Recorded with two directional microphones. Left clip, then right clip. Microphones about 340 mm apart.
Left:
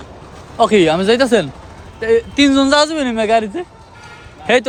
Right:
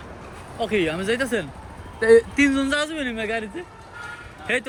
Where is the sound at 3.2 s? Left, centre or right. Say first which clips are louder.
Left 13 dB; left.